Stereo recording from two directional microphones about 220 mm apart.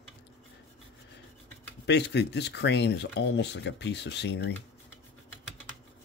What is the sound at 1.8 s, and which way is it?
Speech, 50° left (ahead or behind).